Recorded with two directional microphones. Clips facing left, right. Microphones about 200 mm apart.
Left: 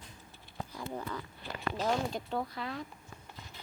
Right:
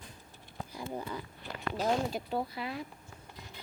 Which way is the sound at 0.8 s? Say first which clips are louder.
Right 1 dB; 15° right (ahead or behind).